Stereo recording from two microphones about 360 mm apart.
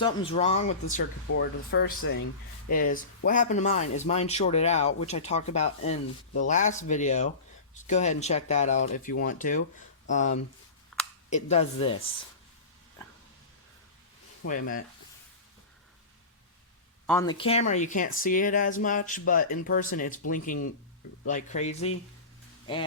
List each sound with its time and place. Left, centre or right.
0.0 s speech: centre
1.3 s speech: left
13.0 s a sound: centre
14.4 s speech: left
17.1 s speech: centre